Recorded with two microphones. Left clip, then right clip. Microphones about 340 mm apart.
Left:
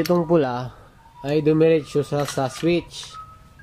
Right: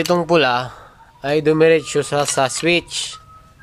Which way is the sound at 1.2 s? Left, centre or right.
Centre.